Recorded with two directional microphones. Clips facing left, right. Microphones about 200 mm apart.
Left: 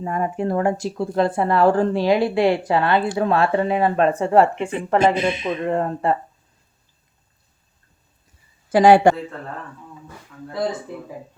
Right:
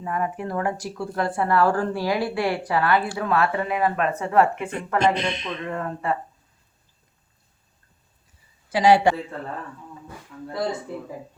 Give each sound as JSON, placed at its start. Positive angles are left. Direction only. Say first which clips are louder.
{"t": 0.0, "sound": "speech", "louder": "left 4 dB", "side_deg": 30}
{"t": 4.9, "sound": "speech", "louder": "left 4 dB", "side_deg": 5}
{"t": 5.6, "sound": "speech", "louder": "left 6 dB", "side_deg": 35}
{"t": 8.7, "sound": "a man's voice", "louder": "left 5 dB", "side_deg": 50}